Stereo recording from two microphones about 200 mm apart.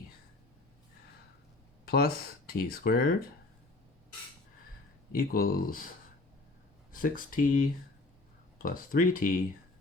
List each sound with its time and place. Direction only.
1.8 s speech: 50° left (ahead or behind)
5.1 s speech: 45° left (ahead or behind)
6.9 s speech: 45° left (ahead or behind)